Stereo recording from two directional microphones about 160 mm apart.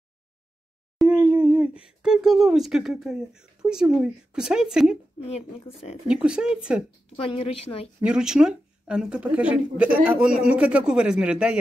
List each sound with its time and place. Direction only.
0.9 s speech: 5° right (ahead or behind)
5.2 s speech: 40° left (ahead or behind)
6.0 s speech: 5° right (ahead or behind)
7.2 s speech: 35° left (ahead or behind)
8.0 s speech: 5° right (ahead or behind)